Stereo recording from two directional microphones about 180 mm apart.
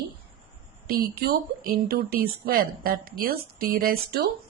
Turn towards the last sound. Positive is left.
turn(degrees=-60)  # may be behind; listen again after turning